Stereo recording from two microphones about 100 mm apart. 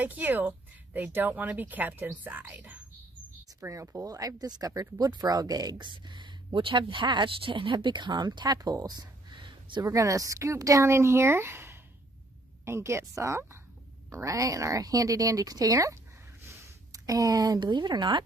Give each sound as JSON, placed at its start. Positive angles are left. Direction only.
{"t": 0.0, "sound": "a woman's voice", "side_deg": -20}
{"t": 3.6, "sound": "speech", "side_deg": -30}
{"t": 5.9, "sound": "speech", "side_deg": -50}
{"t": 9.8, "sound": "speech", "side_deg": -30}